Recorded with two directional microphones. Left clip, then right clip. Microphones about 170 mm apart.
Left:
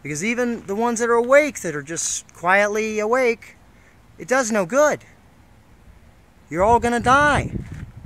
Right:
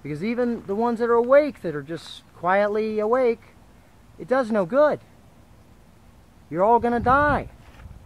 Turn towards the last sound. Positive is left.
turn(degrees=10)  # may be behind; listen again after turning